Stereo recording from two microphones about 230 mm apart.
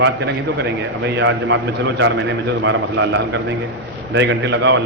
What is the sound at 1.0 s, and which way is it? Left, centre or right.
Speech, right.